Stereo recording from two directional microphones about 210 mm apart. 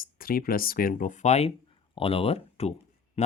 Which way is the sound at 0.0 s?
45° left (ahead or behind).